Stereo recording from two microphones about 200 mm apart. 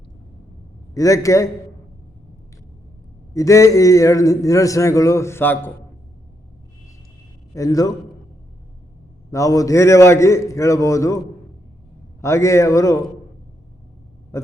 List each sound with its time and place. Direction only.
0.9 s speech: 15° left (ahead or behind)
3.3 s speech: 15° left (ahead or behind)
7.5 s speech: 15° left (ahead or behind)
9.3 s speech: 15° left (ahead or behind)
12.2 s speech: 15° left (ahead or behind)
14.3 s a sound: 15° left (ahead or behind)